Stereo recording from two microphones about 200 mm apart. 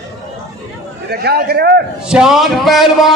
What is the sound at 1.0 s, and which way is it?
Speech, 50° right (ahead or behind).